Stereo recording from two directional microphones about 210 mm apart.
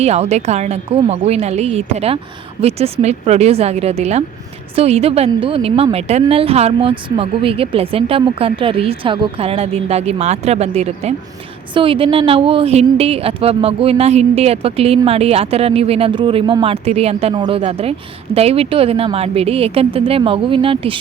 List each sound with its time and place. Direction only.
0.0 s a woman's voice: 30° right (ahead or behind)